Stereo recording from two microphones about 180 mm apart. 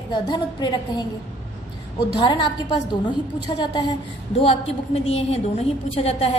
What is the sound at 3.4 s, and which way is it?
A woman's voice, 25° left (ahead or behind).